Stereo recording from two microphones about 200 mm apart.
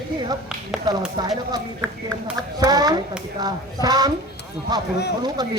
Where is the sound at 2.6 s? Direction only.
20° right (ahead or behind).